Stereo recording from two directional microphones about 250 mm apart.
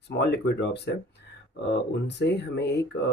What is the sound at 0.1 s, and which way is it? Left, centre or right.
Speech, left.